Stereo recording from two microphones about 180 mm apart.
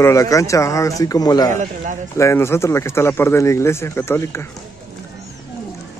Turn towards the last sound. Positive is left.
turn(degrees=15)  # may be behind; listen again after turning